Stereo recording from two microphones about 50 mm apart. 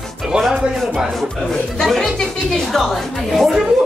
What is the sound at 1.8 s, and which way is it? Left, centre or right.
A woman's voice, centre.